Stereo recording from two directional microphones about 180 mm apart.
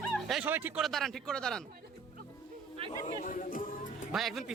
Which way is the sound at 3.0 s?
45° left (ahead or behind).